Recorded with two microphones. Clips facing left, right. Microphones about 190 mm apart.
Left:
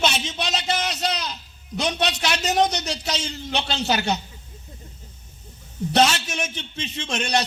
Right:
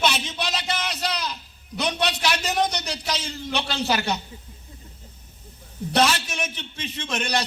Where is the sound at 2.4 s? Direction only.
25° left (ahead or behind).